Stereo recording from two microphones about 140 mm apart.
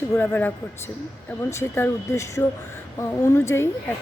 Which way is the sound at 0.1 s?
15° left (ahead or behind).